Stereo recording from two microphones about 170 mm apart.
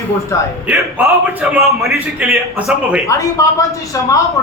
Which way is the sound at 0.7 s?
10° right (ahead or behind).